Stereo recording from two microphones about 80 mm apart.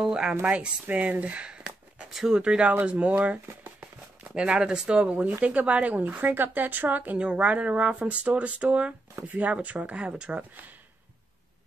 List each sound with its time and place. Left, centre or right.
0.0 s a woman's voice: centre